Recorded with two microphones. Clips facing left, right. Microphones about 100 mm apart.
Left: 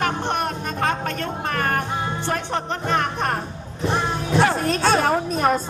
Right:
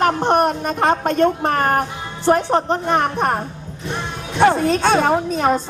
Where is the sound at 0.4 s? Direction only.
25° right (ahead or behind).